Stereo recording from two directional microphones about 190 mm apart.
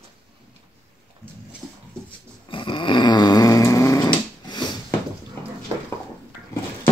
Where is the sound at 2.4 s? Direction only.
25° left (ahead or behind).